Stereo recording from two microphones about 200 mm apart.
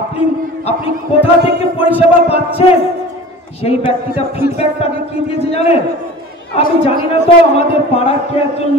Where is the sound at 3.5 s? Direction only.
30° left (ahead or behind).